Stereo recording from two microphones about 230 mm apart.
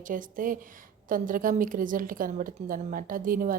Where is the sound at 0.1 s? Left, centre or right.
Right.